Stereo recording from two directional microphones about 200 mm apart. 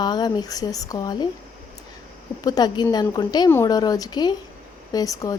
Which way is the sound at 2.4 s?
20° left (ahead or behind).